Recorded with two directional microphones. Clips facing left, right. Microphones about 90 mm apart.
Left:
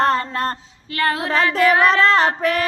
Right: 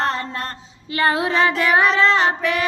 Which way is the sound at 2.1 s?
40° left (ahead or behind).